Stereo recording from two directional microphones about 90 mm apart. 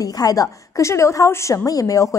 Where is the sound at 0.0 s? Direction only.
45° left (ahead or behind).